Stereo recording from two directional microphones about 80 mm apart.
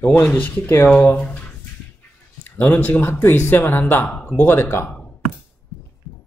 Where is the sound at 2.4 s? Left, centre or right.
Left.